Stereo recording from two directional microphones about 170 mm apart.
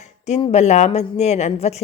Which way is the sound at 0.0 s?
40° left (ahead or behind).